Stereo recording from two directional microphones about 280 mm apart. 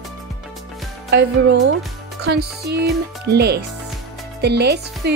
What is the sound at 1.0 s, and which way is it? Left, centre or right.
Speech, right.